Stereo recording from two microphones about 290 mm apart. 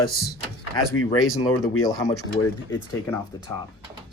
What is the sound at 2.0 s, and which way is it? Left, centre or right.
Speech, left.